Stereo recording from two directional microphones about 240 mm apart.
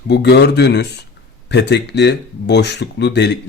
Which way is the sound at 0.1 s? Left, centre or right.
Left.